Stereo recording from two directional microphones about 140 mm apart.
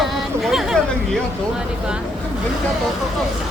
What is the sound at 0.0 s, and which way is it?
Chatter, centre (ahead or behind).